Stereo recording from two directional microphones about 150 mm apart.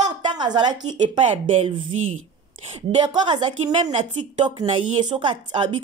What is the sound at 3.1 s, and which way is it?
Speech, 30° right (ahead or behind).